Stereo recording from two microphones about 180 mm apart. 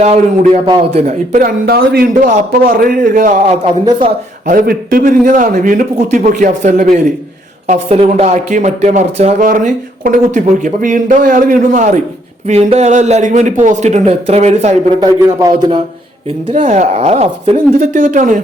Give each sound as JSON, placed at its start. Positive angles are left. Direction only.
{"t": 0.0, "sound": "speech", "side_deg": -35}
{"t": 4.4, "sound": "a man's voice", "side_deg": -50}
{"t": 15.4, "sound": "speech", "side_deg": -25}
{"t": 16.6, "sound": "speech", "side_deg": -45}